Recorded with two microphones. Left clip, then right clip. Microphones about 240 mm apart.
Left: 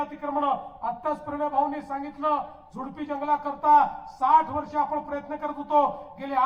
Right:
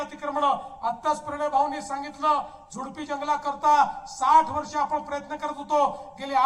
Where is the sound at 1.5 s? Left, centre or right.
Right.